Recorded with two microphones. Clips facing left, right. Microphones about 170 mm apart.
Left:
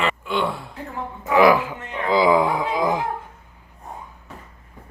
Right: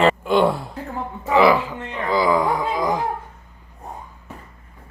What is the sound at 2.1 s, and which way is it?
Speech, 20° left (ahead or behind).